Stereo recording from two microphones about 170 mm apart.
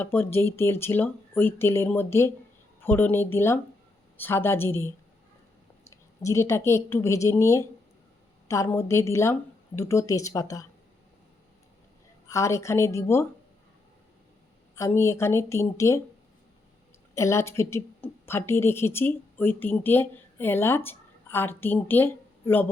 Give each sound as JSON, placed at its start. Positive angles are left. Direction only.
{"t": 0.0, "sound": "speech", "side_deg": 10}
{"t": 6.2, "sound": "speech", "side_deg": 15}
{"t": 12.3, "sound": "speech", "side_deg": 15}
{"t": 14.8, "sound": "speech", "side_deg": 15}
{"t": 17.2, "sound": "a woman's voice", "side_deg": 15}